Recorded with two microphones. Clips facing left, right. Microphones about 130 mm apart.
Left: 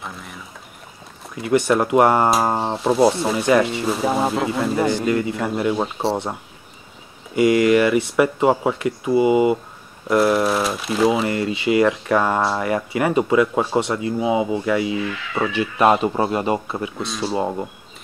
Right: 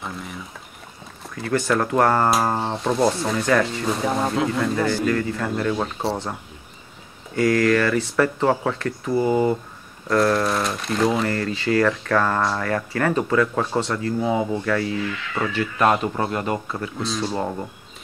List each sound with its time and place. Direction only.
0.0 s a sound: centre (ahead or behind)
1.3 s speech: 20° left (ahead or behind)
2.7 s speech: 5° left (ahead or behind)
3.4 s speech: 20° left (ahead or behind)
3.7 s speech: 5° left (ahead or behind)
4.8 s a man's voice: 20° left (ahead or behind)
7.3 s a man's voice: 15° left (ahead or behind)
11.2 s a man's voice: 15° left (ahead or behind)
15.4 s speech: 30° left (ahead or behind)
15.8 s a man's voice: 15° left (ahead or behind)
17.1 s speech: 5° left (ahead or behind)
17.4 s a man's voice: 15° left (ahead or behind)